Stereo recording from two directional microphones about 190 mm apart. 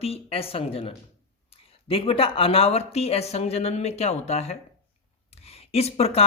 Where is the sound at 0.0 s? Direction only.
30° left (ahead or behind).